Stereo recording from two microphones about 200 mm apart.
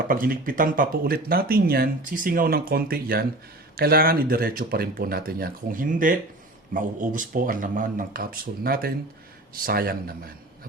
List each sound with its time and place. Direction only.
0.1 s speech: 45° right (ahead or behind)